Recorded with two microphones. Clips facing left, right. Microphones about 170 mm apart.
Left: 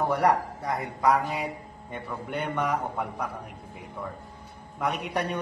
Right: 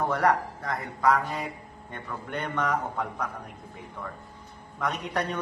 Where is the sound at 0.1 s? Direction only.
10° left (ahead or behind).